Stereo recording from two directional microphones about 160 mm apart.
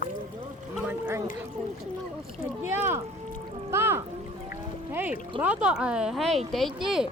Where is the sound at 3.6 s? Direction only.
15° right (ahead or behind).